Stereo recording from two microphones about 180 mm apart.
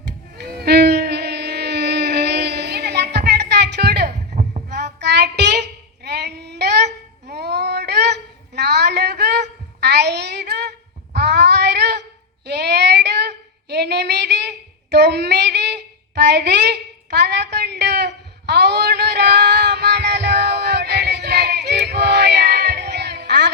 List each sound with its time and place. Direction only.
0.3 s music: 60° right (ahead or behind)
4.4 s heart sounds: 50° right (ahead or behind)
4.9 s child singing: 70° right (ahead or behind)
7.3 s a sound: 65° right (ahead or behind)